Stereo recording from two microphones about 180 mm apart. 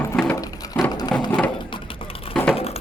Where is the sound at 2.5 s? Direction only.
35° left (ahead or behind).